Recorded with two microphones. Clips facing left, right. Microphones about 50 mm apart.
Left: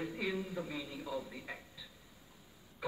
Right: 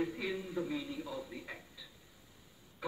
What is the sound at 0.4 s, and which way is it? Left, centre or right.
A man's voice, centre.